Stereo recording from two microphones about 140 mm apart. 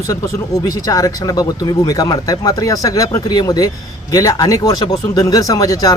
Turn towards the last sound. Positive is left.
turn(degrees=25)  # may be behind; listen again after turning